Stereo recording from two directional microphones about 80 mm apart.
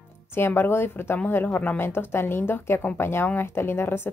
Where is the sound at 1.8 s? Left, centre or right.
Left.